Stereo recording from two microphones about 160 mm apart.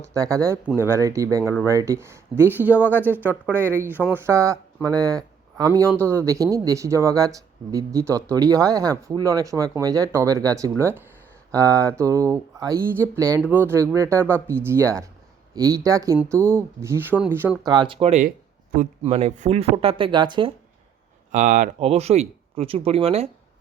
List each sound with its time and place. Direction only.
0.0 s speech: 20° right (ahead or behind)
17.7 s speech: 30° right (ahead or behind)
21.3 s speech: 50° right (ahead or behind)
21.8 s speech: 40° right (ahead or behind)